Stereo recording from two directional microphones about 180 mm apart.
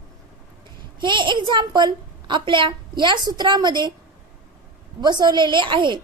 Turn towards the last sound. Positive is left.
turn(degrees=-25)  # may be behind; listen again after turning